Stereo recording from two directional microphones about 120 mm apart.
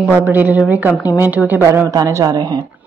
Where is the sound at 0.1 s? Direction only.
15° right (ahead or behind).